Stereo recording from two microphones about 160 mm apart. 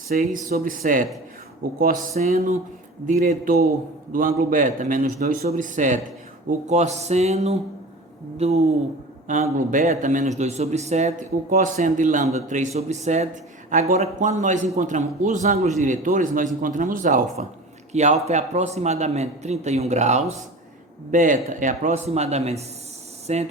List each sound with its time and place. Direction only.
0.1 s speech: 65° right (ahead or behind)
3.1 s a man's voice: 55° right (ahead or behind)
5.5 s a man's voice: 55° right (ahead or behind)
9.2 s a man's voice: 55° right (ahead or behind)
17.9 s a man's voice: 45° right (ahead or behind)